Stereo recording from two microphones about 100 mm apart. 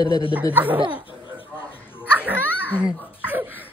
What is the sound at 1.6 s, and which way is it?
Hiccup, 20° left (ahead or behind).